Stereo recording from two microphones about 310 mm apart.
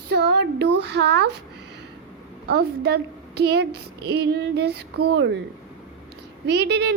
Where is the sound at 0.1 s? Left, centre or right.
Right.